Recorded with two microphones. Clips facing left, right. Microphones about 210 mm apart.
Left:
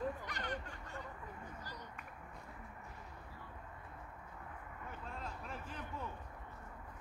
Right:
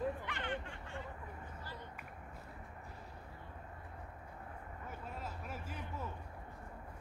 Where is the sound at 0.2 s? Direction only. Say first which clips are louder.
Right 2 dB; 40° left (ahead or behind).